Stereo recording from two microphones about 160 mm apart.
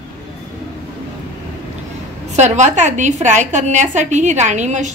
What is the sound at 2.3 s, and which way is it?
A woman's voice, 45° right (ahead or behind).